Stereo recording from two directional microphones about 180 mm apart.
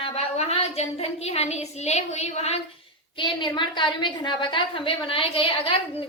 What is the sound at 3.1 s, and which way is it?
A woman's voice, 25° left (ahead or behind).